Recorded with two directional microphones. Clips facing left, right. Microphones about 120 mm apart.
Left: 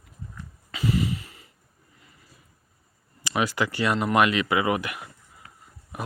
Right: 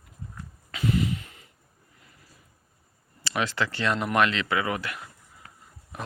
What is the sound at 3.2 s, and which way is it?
Speech, 10° left (ahead or behind).